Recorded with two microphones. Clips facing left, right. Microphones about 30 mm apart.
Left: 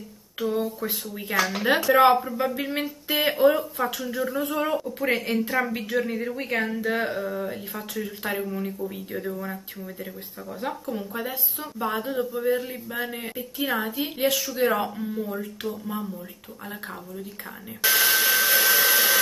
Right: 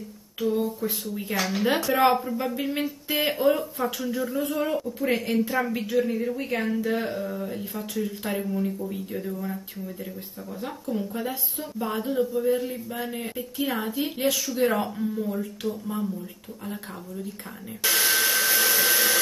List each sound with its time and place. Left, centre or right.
0.4 s speech: left
6.0 s speech: left
10.6 s speech: centre
17.8 s hair dryer: centre